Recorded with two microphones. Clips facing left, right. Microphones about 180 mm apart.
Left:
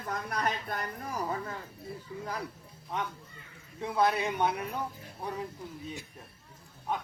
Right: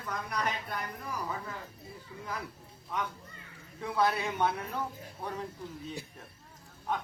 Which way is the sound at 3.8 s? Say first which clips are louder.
Left 2 dB; 20° left (ahead or behind).